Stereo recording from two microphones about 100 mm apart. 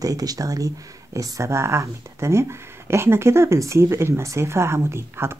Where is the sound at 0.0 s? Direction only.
35° right (ahead or behind).